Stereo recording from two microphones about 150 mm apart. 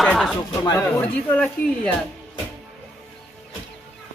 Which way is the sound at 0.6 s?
25° left (ahead or behind).